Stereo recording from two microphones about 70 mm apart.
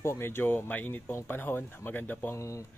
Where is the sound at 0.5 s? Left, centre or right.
Left.